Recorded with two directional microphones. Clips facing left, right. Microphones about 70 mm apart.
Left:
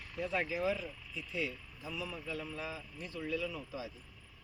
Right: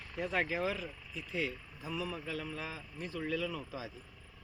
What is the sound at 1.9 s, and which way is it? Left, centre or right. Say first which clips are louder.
A man's voice: right 2 dB; right.